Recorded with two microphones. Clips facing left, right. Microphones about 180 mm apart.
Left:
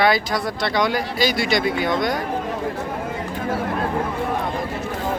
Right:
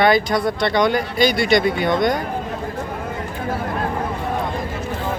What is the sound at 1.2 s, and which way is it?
Speech, 55° right (ahead or behind).